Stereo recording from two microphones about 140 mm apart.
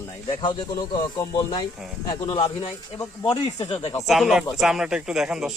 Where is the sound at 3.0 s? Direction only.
30° left (ahead or behind).